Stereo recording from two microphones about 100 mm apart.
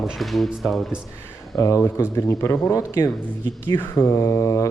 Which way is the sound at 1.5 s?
35° left (ahead or behind).